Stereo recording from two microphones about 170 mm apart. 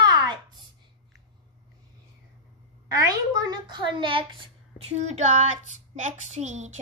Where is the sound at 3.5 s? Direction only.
25° right (ahead or behind).